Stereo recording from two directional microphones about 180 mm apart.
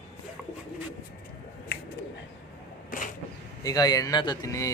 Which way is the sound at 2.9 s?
50° left (ahead or behind).